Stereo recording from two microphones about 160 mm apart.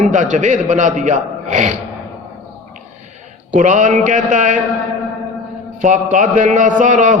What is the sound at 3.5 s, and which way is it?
A man's voice, 50° right (ahead or behind).